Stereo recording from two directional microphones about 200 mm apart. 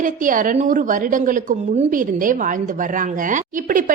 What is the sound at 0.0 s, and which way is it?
A woman's voice, 40° right (ahead or behind).